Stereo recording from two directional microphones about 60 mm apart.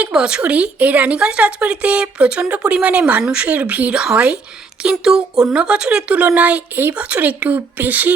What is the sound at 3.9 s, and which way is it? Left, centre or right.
Speech, centre.